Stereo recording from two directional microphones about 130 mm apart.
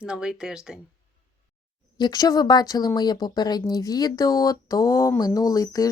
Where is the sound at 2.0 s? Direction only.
30° left (ahead or behind).